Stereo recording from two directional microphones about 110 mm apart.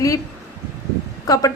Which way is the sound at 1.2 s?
35° left (ahead or behind).